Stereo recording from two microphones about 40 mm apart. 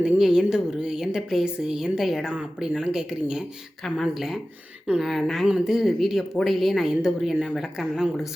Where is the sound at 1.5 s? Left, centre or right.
Right.